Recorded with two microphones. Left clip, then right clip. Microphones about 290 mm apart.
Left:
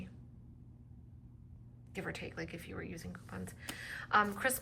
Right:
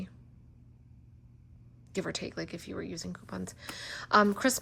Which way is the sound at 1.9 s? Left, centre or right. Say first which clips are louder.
Right 7 dB; centre.